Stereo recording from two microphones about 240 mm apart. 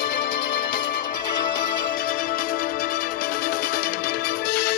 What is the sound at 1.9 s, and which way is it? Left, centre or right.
Music, left.